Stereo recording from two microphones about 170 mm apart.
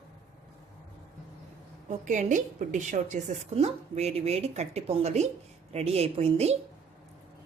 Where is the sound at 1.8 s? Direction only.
50° right (ahead or behind).